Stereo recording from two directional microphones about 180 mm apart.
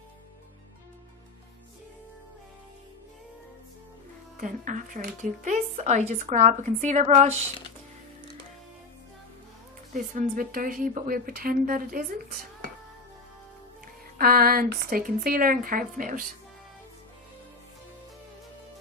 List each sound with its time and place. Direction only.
4.4 s speech: 45° right (ahead or behind)
9.9 s a woman's voice: 50° right (ahead or behind)
13.8 s a woman's voice: 55° right (ahead or behind)